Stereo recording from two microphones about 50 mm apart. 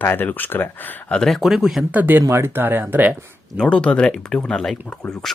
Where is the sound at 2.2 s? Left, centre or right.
Right.